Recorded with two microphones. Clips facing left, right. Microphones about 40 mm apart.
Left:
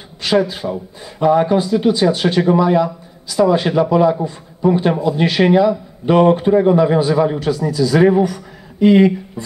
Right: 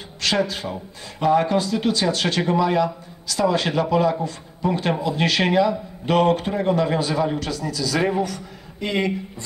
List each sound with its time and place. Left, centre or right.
0.2 s a sound: centre
0.6 s speech: left
1.2 s a man's voice: centre